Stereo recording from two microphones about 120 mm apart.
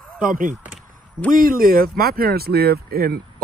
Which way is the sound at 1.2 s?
5° right (ahead or behind).